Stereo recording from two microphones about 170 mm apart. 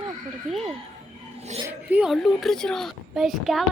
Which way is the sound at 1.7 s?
10° right (ahead or behind).